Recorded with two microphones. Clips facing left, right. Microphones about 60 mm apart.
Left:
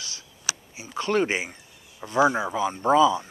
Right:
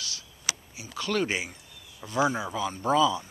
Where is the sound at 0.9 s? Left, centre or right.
Left.